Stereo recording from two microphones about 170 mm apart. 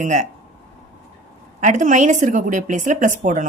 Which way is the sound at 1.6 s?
50° right (ahead or behind).